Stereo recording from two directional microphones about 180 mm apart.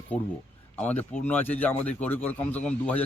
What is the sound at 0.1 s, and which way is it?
Speech, 10° left (ahead or behind).